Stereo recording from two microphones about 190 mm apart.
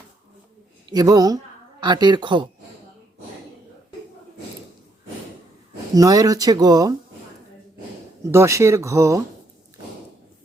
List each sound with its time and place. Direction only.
0.9 s speech: 20° right (ahead or behind)
5.9 s speech: 15° right (ahead or behind)
8.2 s speech: 15° right (ahead or behind)